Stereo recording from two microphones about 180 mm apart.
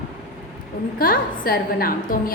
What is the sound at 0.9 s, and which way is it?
A woman's voice, 55° left (ahead or behind).